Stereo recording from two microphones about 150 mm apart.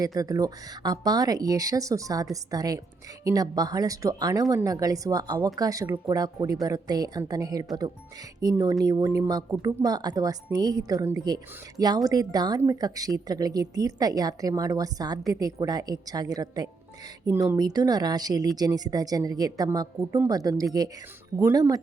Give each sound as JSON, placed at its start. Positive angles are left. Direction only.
{"t": 0.0, "sound": "a woman's voice", "side_deg": -25}